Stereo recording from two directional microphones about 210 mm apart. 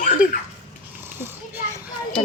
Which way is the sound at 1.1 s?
10° right (ahead or behind).